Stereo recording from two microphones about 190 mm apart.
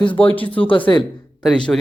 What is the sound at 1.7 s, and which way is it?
Speech, 5° left (ahead or behind).